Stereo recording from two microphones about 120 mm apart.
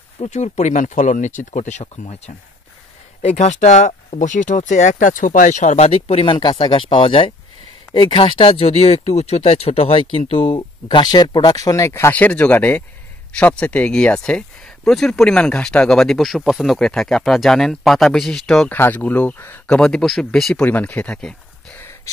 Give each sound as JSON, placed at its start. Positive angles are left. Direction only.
{"t": 0.2, "sound": "speech", "side_deg": 70}
{"t": 1.4, "sound": "speech", "side_deg": 80}
{"t": 18.7, "sound": "speech", "side_deg": 15}
{"t": 22.1, "sound": "gasp", "side_deg": 25}